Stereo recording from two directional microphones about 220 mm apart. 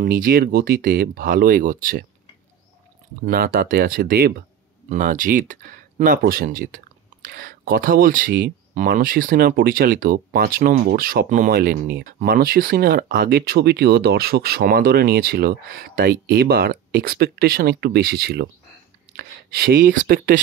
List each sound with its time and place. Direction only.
0.0 s speech: 40° right (ahead or behind)
3.2 s speech: 45° right (ahead or behind)